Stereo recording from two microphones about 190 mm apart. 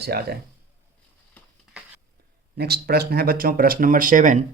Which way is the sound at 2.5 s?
55° right (ahead or behind).